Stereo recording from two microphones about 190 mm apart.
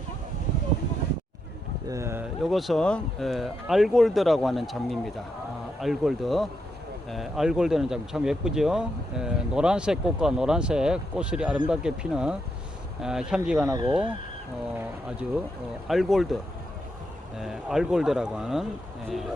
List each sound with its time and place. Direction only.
1.9 s speech: 15° right (ahead or behind)
2.4 s speech: centre (ahead or behind)
13.7 s speech: 20° right (ahead or behind)
15.9 s speech: centre (ahead or behind)